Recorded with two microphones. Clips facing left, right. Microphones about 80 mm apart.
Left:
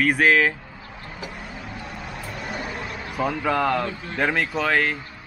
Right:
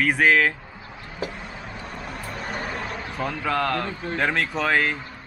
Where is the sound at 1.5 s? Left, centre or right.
Centre.